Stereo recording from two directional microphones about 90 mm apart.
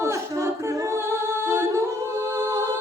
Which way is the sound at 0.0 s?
35° right (ahead or behind).